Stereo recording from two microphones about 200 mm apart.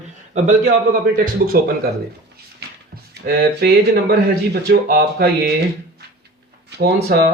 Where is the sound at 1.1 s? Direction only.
45° right (ahead or behind).